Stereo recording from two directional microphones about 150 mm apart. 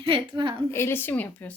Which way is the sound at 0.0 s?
35° right (ahead or behind).